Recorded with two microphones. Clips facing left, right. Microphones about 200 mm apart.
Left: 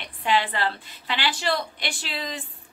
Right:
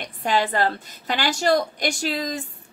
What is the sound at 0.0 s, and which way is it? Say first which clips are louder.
A woman's voice: right 2 dB; 45° right (ahead or behind).